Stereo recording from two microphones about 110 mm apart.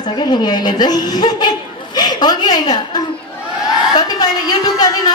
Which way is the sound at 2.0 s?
40° left (ahead or behind).